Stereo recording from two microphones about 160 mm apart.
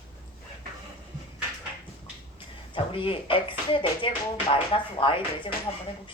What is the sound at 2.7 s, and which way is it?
Speech, 35° left (ahead or behind).